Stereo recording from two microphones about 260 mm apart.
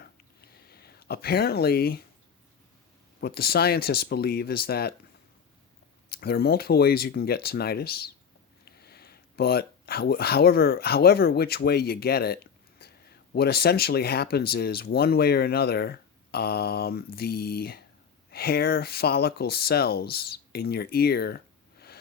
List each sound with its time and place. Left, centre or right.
0.0 s a sound: left
3.2 s speech: left
6.1 s speech: left